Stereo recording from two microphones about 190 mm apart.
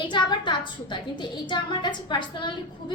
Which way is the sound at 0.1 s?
25° left (ahead or behind).